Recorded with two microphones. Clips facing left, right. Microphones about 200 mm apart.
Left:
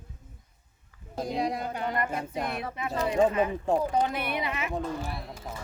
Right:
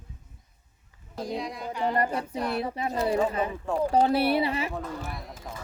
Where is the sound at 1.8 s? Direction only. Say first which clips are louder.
Right 7 dB; 35° right (ahead or behind).